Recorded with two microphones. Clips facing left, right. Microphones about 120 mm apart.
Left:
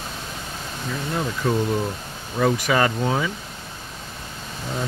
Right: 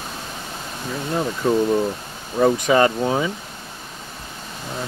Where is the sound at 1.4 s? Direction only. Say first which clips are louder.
Right 5 dB; 25° right (ahead or behind).